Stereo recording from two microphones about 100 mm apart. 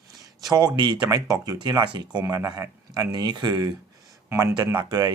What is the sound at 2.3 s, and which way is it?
Speech, 35° right (ahead or behind).